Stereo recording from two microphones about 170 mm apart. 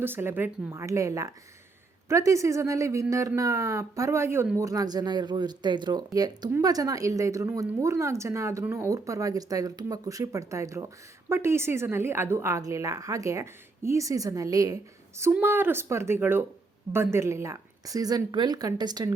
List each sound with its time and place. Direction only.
0.0 s speech: 15° right (ahead or behind)